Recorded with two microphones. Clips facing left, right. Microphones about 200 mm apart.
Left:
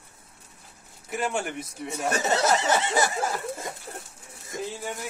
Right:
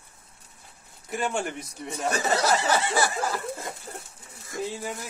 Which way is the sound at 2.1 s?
20° left (ahead or behind).